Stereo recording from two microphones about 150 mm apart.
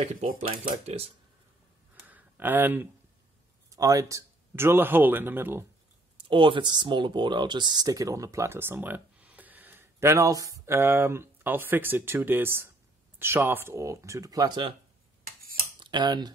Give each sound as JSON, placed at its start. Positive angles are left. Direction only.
{"t": 0.8, "sound": "speech", "side_deg": -40}
{"t": 2.0, "sound": "a sound", "side_deg": -10}
{"t": 3.7, "sound": "a man's voice", "side_deg": -20}
{"t": 6.1, "sound": "speech", "side_deg": -35}
{"t": 15.8, "sound": "speech", "side_deg": -30}